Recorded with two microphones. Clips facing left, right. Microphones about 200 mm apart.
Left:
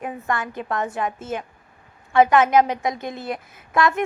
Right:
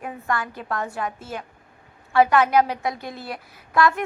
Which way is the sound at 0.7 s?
20° left (ahead or behind).